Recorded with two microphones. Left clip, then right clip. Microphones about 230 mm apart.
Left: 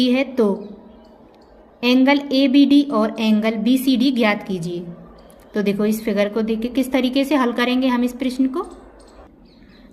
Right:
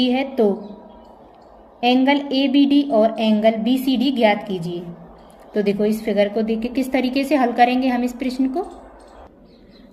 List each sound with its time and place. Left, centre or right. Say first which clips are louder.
0.0 s a woman's voice: left 1 dB; left
1.8 s a woman's voice: left 1 dB; left